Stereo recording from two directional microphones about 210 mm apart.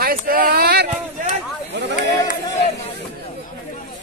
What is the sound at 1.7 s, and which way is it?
Chatter, 55° right (ahead or behind).